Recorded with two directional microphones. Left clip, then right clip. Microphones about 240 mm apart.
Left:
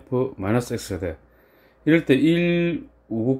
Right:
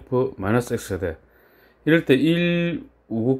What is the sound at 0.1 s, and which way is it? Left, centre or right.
Speech, centre.